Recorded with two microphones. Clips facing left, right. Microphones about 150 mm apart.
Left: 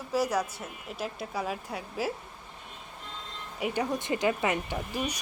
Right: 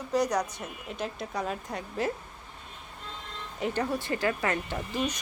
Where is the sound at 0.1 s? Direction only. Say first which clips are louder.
Right 1 dB; 5° left (ahead or behind).